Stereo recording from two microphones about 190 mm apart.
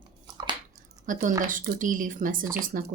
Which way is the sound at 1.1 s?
45° right (ahead or behind).